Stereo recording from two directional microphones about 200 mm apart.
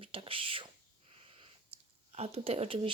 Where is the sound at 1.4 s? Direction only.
30° right (ahead or behind).